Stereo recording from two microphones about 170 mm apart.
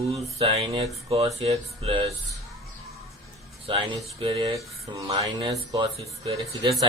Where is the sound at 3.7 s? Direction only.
30° right (ahead or behind).